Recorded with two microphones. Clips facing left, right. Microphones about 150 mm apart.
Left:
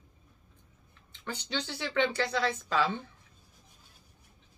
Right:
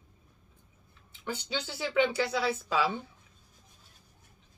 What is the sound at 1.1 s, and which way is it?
A woman's voice, 10° right (ahead or behind).